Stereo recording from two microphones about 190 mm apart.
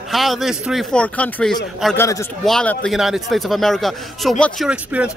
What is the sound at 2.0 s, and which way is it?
Speech, 15° left (ahead or behind).